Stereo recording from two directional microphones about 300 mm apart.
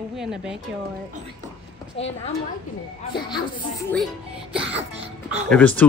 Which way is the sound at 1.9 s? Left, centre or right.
Left.